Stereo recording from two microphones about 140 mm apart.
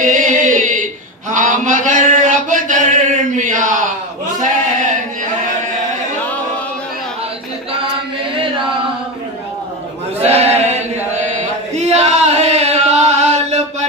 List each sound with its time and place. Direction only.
0.0 s chant: 65° right (ahead or behind)
1.3 s a sound: 65° right (ahead or behind)
10.2 s chant: 50° right (ahead or behind)